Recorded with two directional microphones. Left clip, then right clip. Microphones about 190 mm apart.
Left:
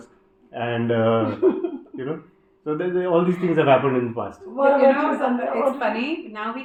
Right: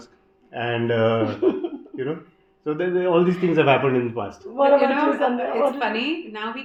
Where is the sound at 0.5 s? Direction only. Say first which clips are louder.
Even; 30° right (ahead or behind).